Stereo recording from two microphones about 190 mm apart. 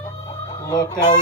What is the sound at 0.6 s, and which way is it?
Speech, 20° left (ahead or behind).